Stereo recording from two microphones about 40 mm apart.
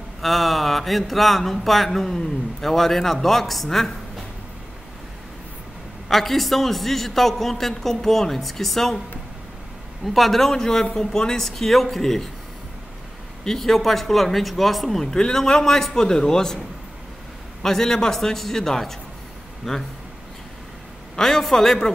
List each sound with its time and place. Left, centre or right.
0.2 s speech: centre
6.0 s speech: centre
10.0 s speech: centre
13.4 s speech: centre
21.2 s speech: centre